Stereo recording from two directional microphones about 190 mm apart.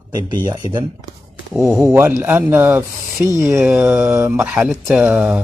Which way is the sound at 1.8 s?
10° right (ahead or behind).